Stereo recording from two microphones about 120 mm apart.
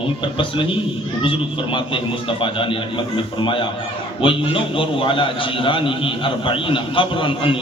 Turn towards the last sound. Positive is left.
turn(degrees=45)  # may be behind; listen again after turning